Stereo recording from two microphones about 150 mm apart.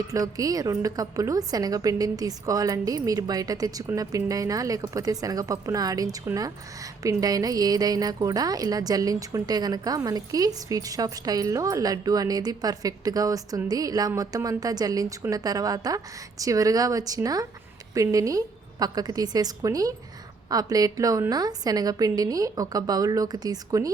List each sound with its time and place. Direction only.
0.1 s speech: 25° right (ahead or behind)